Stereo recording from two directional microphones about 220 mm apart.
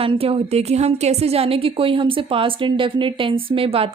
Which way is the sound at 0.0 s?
25° right (ahead or behind).